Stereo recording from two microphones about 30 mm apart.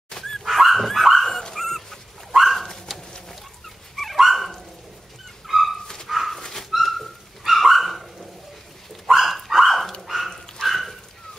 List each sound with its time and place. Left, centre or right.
0.1 s dog: centre
0.4 s dog: centre
2.3 s bird: centre
3.6 s dog: centre
5.5 s dog: centre
9.1 s dog: centre
10.7 s a sound: centre